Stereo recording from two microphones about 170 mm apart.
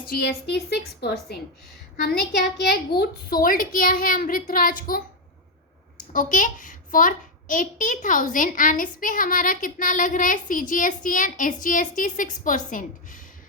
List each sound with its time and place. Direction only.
0.1 s a woman's voice: 65° left (ahead or behind)
6.1 s a child's voice: 50° left (ahead or behind)